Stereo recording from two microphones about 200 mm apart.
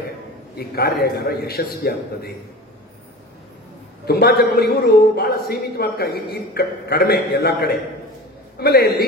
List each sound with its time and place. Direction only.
0.6 s a man's voice: 50° left (ahead or behind)
4.1 s a man's voice: 50° left (ahead or behind)